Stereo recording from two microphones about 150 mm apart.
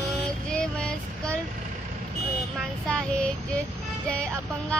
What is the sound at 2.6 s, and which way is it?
Child singing, 5° left (ahead or behind).